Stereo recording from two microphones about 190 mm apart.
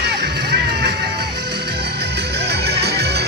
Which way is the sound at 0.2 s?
55° right (ahead or behind).